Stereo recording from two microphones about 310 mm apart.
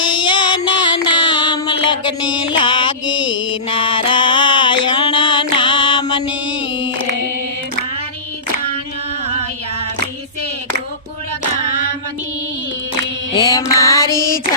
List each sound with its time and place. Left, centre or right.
0.2 s music: centre
9.2 s music: centre
13.3 s mantra: centre